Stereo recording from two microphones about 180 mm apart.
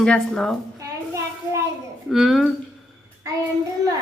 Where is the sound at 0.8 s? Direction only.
15° right (ahead or behind).